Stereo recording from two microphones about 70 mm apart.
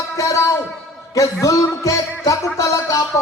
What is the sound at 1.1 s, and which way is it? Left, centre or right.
A man's voice, left.